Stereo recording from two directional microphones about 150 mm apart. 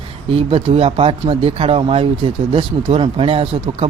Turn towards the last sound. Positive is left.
turn(degrees=-40)  # may be behind; listen again after turning